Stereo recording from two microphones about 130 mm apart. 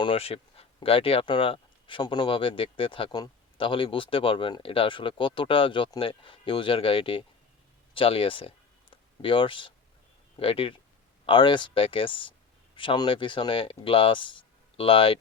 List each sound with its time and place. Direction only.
0.0 s speech: 45° left (ahead or behind)